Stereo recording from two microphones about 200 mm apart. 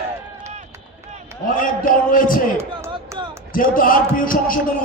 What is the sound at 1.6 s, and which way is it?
Music, 45° left (ahead or behind).